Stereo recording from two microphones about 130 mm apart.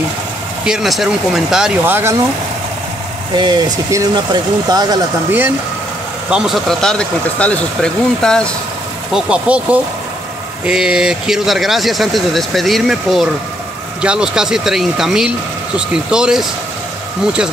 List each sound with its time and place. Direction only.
0.7 s speech: 5° right (ahead or behind)
1.9 s speech: 15° right (ahead or behind)
3.3 s speech: 35° right (ahead or behind)
6.3 s speech: centre (ahead or behind)
9.1 s speech: 10° right (ahead or behind)